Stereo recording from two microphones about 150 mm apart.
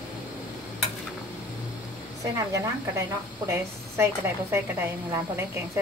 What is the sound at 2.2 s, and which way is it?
A woman's voice, 20° right (ahead or behind).